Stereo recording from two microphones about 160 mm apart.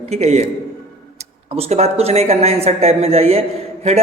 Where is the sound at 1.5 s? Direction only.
40° right (ahead or behind).